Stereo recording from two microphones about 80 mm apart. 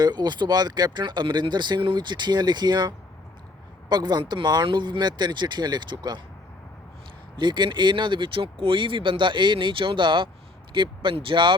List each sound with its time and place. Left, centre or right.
0.0 s speech: right
7.3 s speech: right